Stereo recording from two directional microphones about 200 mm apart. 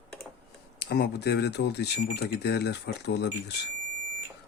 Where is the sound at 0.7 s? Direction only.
55° left (ahead or behind).